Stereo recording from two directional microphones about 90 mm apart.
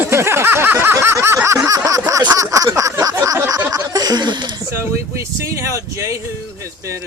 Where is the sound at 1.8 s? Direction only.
40° right (ahead or behind); by 4.6 s 55° right (ahead or behind).